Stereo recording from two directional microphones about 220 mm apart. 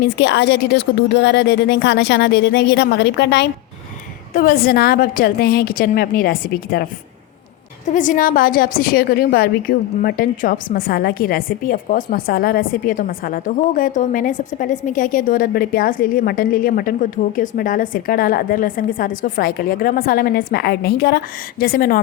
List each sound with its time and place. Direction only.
0.0 s a woman's voice: 50° left (ahead or behind)
7.9 s a woman's voice: 35° left (ahead or behind)